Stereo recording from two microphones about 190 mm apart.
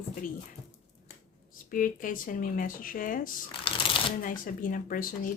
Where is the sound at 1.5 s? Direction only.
45° left (ahead or behind).